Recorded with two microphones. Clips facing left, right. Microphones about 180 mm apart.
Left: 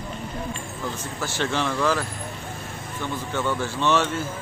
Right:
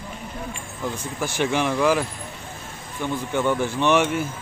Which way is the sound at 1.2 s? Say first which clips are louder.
Right 3 dB; 15° right (ahead or behind).